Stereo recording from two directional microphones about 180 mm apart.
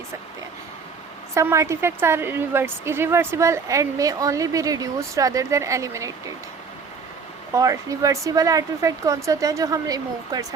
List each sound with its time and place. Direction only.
1.3 s a woman's voice: 15° right (ahead or behind)
7.5 s speech: 20° right (ahead or behind)